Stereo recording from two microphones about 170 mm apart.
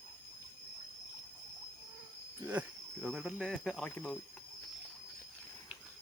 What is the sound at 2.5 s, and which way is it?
Speech, 5° right (ahead or behind).